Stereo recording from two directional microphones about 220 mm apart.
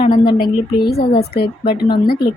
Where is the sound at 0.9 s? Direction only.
45° left (ahead or behind).